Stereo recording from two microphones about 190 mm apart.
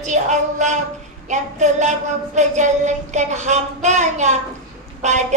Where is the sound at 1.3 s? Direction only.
40° right (ahead or behind).